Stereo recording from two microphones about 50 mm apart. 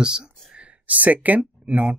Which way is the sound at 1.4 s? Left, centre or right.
Right.